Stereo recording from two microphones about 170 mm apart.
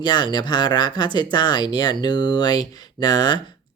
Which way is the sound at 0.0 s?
25° left (ahead or behind).